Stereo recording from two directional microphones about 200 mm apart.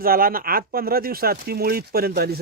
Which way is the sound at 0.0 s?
45° right (ahead or behind).